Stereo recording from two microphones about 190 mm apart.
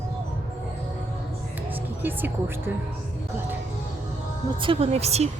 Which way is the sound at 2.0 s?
10° right (ahead or behind).